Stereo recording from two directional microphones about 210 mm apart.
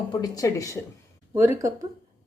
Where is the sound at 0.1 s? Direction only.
15° left (ahead or behind).